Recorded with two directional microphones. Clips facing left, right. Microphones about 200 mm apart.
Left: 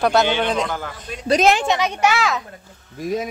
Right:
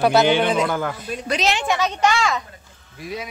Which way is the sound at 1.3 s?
45° left (ahead or behind).